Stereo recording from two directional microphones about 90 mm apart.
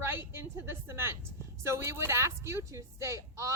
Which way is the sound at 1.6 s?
30° right (ahead or behind).